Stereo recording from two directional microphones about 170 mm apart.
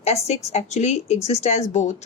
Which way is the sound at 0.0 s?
40° left (ahead or behind).